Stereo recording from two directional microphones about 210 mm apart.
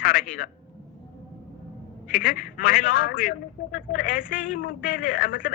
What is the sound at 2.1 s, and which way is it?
A man's voice, 45° left (ahead or behind).